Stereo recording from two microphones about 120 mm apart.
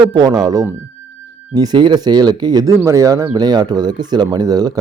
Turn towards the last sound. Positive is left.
turn(degrees=-30)  # may be behind; listen again after turning